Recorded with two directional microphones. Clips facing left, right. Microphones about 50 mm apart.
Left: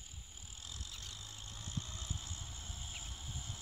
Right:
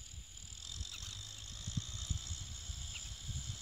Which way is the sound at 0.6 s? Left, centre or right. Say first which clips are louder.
Even; left.